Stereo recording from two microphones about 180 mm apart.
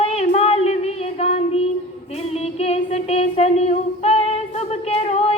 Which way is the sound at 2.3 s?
35° left (ahead or behind).